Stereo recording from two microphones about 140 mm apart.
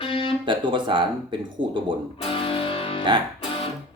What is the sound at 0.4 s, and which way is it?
Speech, 35° right (ahead or behind).